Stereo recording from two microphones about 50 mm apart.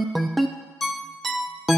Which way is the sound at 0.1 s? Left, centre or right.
Centre.